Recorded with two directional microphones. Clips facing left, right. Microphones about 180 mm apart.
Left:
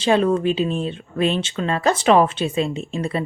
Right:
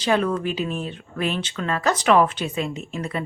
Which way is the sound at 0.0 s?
25° left (ahead or behind).